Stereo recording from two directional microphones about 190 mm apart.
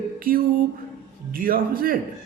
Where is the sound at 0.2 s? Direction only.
50° right (ahead or behind).